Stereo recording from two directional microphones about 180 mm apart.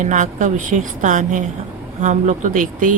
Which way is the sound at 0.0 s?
45° right (ahead or behind).